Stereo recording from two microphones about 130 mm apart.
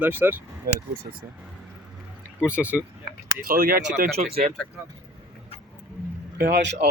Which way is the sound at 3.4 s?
90° right.